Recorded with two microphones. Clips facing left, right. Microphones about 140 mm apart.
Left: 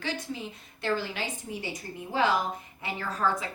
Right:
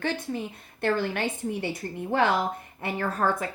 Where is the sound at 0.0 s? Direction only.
55° right (ahead or behind).